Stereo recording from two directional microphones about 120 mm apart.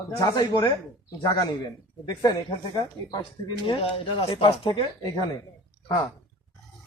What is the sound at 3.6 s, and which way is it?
Speech, 50° left (ahead or behind).